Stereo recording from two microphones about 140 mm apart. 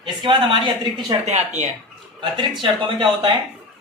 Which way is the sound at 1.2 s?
55° right (ahead or behind).